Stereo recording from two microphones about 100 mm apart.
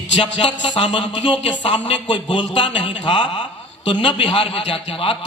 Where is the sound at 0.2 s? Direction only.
60° left (ahead or behind).